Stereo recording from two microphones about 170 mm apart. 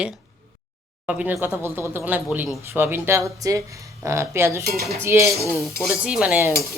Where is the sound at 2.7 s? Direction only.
15° right (ahead or behind).